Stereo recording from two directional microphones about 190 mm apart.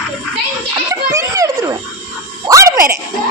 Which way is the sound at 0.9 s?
15° right (ahead or behind).